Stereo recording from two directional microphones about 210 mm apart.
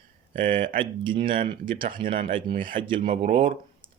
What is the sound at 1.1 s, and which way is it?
Speech, 25° right (ahead or behind).